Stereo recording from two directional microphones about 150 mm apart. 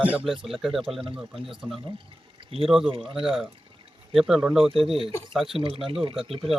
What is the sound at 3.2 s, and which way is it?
Speech, centre (ahead or behind).